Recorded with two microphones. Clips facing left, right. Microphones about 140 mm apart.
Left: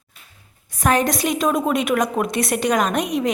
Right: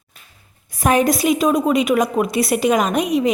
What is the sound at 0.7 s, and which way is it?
A woman's voice, 10° right (ahead or behind).